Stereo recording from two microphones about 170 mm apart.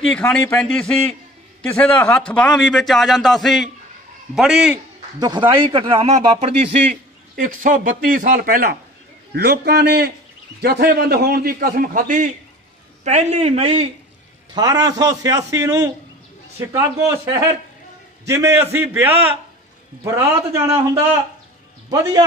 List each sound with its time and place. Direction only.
0.0 s a man's voice: 5° left (ahead or behind)
5.7 s a man's voice: 30° right (ahead or behind); by 8.7 s 55° right (ahead or behind)
9.3 s a man's voice: 70° right (ahead or behind); by 13.8 s 35° right (ahead or behind)
14.5 s a man's voice: 20° right (ahead or behind)